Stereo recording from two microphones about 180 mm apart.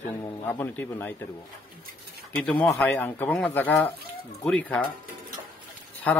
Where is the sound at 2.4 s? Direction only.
5° left (ahead or behind).